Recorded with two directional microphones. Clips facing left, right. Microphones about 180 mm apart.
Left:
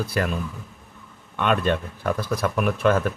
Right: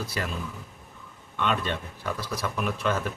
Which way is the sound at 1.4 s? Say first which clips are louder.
Left 6 dB; 55° left (ahead or behind).